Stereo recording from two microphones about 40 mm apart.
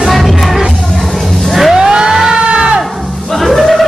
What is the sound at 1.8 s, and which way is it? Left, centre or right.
Vehicle, centre.